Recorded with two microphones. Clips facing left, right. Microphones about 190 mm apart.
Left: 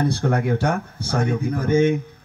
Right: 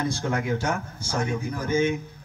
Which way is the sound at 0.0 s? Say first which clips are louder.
Left 6 dB; 60° left (ahead or behind).